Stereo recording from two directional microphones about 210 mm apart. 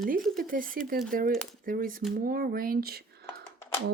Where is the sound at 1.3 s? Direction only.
Centre (ahead or behind).